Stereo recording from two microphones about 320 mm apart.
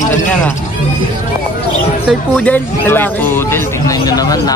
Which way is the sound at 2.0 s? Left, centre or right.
Centre.